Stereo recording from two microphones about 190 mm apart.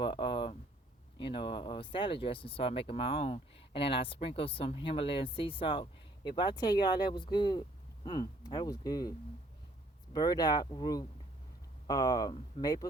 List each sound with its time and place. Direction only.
0.0 s a sound: 25° left (ahead or behind)
1.2 s speech: 25° left (ahead or behind)
12.3 s speech: 30° left (ahead or behind)